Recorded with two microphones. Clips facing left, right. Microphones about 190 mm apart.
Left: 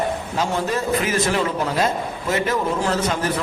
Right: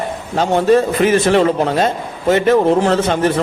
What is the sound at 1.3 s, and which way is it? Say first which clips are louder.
A man's voice: right 8 dB; 60° right (ahead or behind).